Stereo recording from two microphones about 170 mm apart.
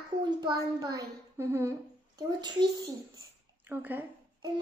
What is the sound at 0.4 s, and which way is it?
A child's voice, 25° right (ahead or behind).